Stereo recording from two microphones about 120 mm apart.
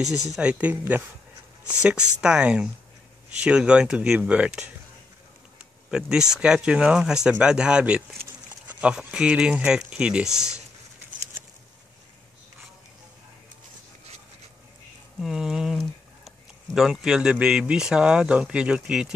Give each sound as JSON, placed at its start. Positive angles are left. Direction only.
{"t": 0.1, "sound": "speech", "side_deg": 30}
{"t": 0.4, "sound": "speech", "side_deg": -10}
{"t": 2.2, "sound": "speech", "side_deg": -10}
{"t": 5.9, "sound": "speech", "side_deg": -5}
{"t": 15.1, "sound": "speech", "side_deg": -5}